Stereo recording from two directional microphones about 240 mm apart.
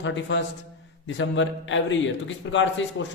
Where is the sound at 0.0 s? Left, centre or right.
Left.